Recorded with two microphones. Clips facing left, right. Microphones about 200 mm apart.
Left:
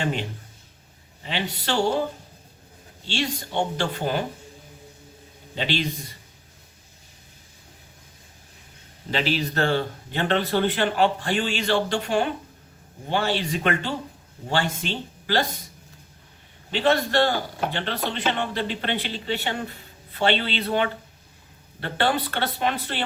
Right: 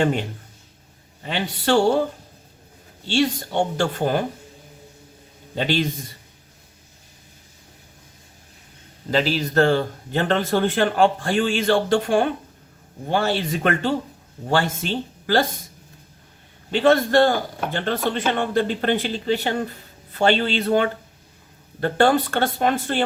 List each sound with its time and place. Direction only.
1.2 s speech: 50° right (ahead or behind)
3.1 s speech: 50° right (ahead or behind)
5.5 s speech: 45° right (ahead or behind)
9.0 s speech: 40° right (ahead or behind)
15.3 s speech: 45° right (ahead or behind)
16.7 s speech: 50° right (ahead or behind)